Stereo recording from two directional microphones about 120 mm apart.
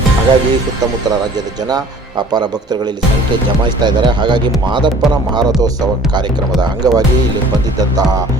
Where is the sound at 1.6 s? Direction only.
35° right (ahead or behind).